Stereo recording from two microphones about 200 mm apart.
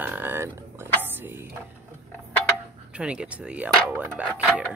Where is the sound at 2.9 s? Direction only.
5° right (ahead or behind).